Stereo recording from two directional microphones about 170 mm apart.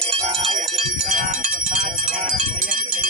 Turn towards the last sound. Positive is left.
turn(degrees=-50)  # may be behind; listen again after turning